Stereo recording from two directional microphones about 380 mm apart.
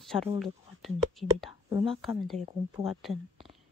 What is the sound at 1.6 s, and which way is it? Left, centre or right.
Speech, centre.